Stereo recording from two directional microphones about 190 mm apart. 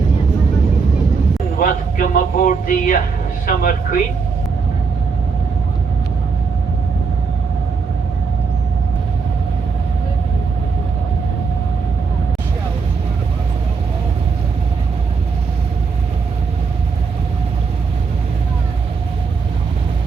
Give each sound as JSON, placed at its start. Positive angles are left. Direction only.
{"t": 1.5, "sound": "speech", "side_deg": 45}